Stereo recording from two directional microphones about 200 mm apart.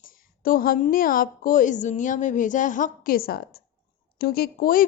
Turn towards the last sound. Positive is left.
turn(degrees=45)  # may be behind; listen again after turning